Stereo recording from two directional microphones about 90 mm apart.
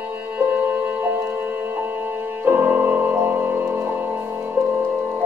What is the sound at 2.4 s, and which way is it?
Music, 25° right (ahead or behind).